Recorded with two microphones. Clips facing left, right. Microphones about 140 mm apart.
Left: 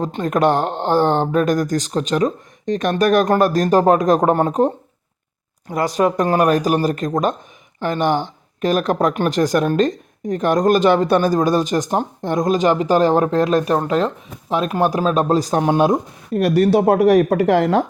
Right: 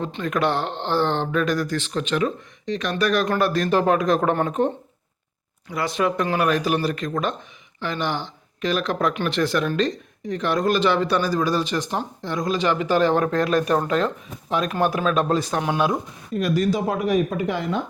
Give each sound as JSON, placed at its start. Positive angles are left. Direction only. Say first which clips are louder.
{"t": 0.0, "sound": "speech", "louder": "left 6 dB", "side_deg": 45}
{"t": 16.4, "sound": "speech", "louder": "left 7 dB", "side_deg": 65}